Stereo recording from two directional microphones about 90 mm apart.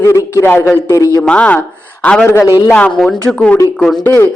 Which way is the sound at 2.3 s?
40° left (ahead or behind).